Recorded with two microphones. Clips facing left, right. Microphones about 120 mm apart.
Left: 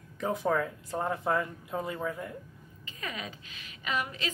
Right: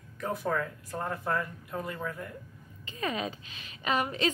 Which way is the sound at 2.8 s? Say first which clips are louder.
Right 7 dB; 30° right (ahead or behind).